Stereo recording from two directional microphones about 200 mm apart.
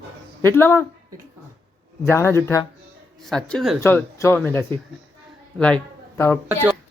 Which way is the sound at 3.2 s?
5° left (ahead or behind).